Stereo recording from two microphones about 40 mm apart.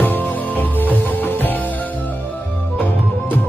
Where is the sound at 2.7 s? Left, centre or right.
Left.